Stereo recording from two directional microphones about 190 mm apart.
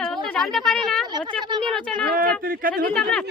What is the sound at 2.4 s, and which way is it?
Speech, 50° right (ahead or behind).